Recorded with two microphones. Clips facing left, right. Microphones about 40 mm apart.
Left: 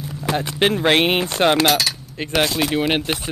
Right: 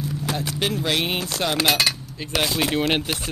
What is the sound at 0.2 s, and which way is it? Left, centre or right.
Speech, left.